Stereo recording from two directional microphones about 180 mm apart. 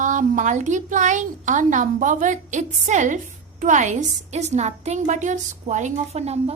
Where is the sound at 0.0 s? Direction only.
45° right (ahead or behind).